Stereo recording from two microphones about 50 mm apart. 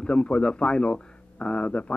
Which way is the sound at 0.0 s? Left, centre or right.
Left.